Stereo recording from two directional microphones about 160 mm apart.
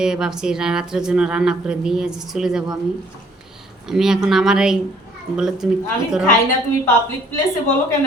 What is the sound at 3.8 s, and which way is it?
Speech, 5° right (ahead or behind).